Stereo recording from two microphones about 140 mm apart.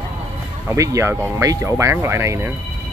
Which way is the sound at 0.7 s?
20° right (ahead or behind).